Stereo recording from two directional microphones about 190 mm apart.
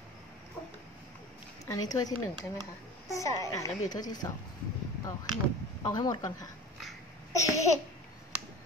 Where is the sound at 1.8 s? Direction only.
20° left (ahead or behind).